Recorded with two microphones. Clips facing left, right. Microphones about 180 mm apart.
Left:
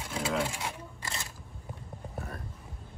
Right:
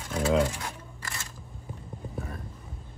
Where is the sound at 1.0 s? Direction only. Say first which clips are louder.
Left 1 dB; 20° left (ahead or behind).